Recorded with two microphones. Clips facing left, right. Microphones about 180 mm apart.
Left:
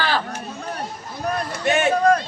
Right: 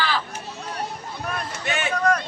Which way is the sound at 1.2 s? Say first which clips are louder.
Left 8 dB; 35° left (ahead or behind).